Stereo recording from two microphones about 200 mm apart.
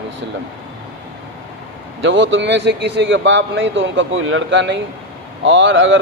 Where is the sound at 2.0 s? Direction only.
65° right (ahead or behind).